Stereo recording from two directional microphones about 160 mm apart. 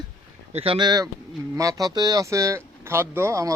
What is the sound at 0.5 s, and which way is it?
Speech, 35° right (ahead or behind).